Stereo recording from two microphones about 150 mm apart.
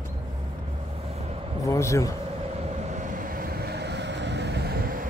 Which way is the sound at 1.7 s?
20° left (ahead or behind).